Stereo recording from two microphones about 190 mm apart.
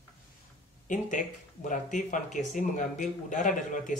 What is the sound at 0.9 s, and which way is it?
Speech, 45° left (ahead or behind).